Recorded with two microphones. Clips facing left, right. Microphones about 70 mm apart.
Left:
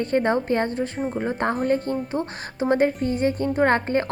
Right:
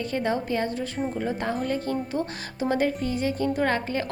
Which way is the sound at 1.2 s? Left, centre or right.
Left.